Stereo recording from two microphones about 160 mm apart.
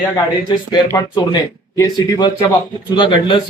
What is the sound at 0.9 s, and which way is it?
A man's voice, 20° left (ahead or behind).